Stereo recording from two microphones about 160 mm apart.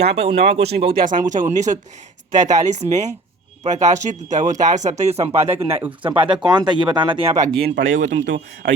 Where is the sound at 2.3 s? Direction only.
50° right (ahead or behind).